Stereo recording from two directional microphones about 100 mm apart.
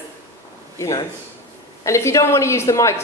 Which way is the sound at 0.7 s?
30° left (ahead or behind).